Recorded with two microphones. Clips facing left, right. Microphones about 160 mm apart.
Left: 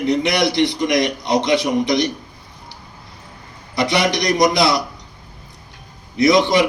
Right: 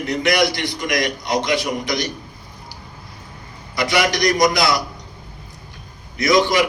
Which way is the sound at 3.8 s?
30° left (ahead or behind).